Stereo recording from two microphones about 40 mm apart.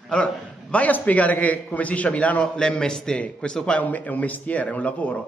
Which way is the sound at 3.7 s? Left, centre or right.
Left.